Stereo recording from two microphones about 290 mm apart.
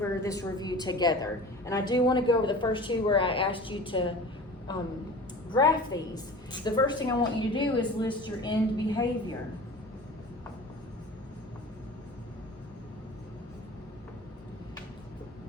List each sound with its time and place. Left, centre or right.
0.0 s a woman's voice: centre
5.5 s a woman's voice: centre